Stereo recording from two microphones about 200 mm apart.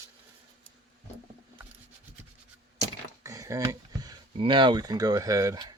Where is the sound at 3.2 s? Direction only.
15° right (ahead or behind).